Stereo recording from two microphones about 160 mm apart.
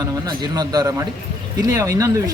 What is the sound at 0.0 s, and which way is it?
A man's voice, 25° right (ahead or behind).